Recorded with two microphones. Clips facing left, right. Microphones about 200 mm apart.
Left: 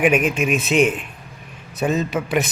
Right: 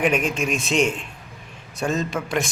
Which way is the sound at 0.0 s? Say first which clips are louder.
Left 4 dB; 5° left (ahead or behind).